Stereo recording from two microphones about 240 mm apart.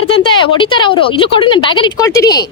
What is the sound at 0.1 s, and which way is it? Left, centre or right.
Speech, left.